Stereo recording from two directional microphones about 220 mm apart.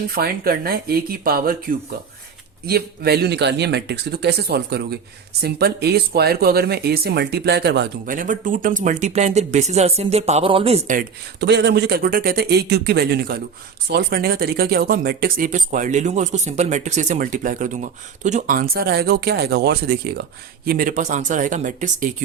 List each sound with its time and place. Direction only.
0.1 s speech: 45° right (ahead or behind)
2.6 s speech: 45° right (ahead or behind)